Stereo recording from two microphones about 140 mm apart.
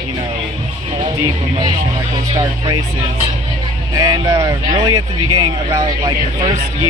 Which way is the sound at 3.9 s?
30° right (ahead or behind).